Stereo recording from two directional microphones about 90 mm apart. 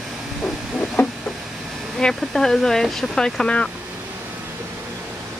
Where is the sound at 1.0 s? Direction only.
25° left (ahead or behind).